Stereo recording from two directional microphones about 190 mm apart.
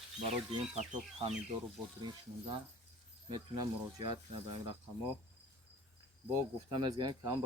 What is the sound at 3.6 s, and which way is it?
Speech, 20° right (ahead or behind).